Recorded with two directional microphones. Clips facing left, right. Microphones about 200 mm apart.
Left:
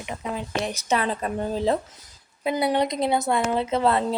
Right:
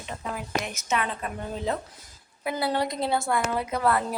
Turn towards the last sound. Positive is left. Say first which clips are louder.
# left 4 dB
turn(degrees=25)  # may be behind; listen again after turning